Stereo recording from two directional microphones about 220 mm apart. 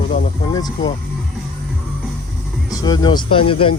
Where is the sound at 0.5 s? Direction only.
20° left (ahead or behind).